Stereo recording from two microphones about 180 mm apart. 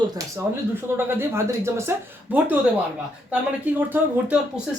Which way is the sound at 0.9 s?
15° right (ahead or behind).